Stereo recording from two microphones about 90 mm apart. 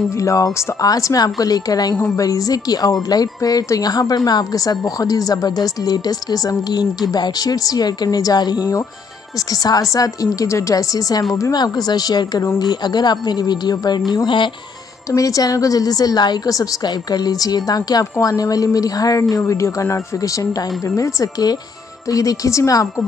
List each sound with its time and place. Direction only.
0.1 s a woman's voice: 35° left (ahead or behind); by 14.0 s 50° left (ahead or behind)
14.1 s speech: 60° left (ahead or behind)
15.0 s a woman's voice: 40° left (ahead or behind)